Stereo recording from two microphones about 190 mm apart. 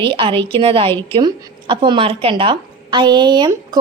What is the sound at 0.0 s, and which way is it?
Speech, 25° right (ahead or behind).